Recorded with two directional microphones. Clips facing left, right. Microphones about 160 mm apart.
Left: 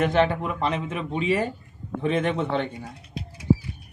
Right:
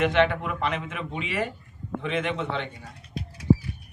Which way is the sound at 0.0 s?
40° left (ahead or behind).